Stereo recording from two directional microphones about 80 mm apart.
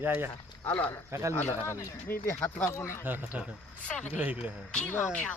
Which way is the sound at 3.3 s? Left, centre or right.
Centre.